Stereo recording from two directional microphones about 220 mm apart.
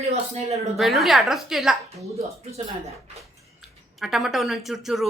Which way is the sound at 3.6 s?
Centre (ahead or behind).